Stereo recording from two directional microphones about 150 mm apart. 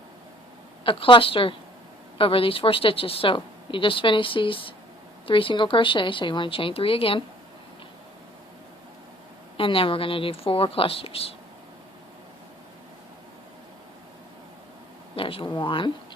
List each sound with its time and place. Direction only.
0.9 s a woman's voice: 35° left (ahead or behind)
9.6 s a woman's voice: 35° left (ahead or behind)
15.1 s a woman's voice: 35° left (ahead or behind)